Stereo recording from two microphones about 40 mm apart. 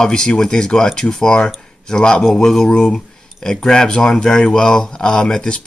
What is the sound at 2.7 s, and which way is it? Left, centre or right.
Speech, left.